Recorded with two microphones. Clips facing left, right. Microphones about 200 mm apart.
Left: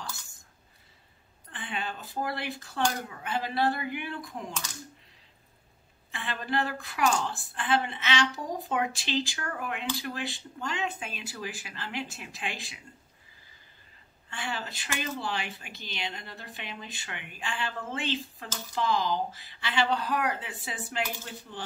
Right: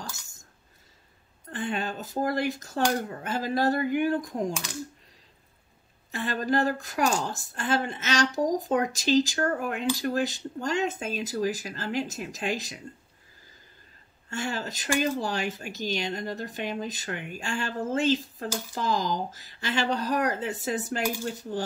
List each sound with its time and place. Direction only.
1.5 s speech: 45° right (ahead or behind)
6.1 s speech: 40° right (ahead or behind)
14.3 s speech: 45° right (ahead or behind)